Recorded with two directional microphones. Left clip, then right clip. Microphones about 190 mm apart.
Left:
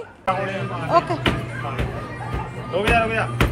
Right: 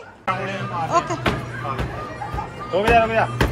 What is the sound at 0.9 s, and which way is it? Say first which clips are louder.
Music: left 3 dB; 10° right (ahead or behind).